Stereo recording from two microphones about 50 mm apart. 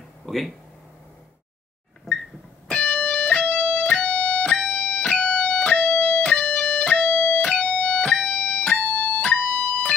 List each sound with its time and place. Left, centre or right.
2.7 s music: left
8.9 s music: left
9.2 s music: left